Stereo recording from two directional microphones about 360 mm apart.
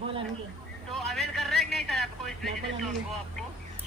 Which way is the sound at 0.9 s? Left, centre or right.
Centre.